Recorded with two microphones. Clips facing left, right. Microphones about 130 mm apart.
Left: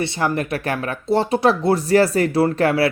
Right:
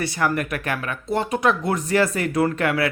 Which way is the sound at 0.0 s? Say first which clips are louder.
Left 2 dB; 25° left (ahead or behind).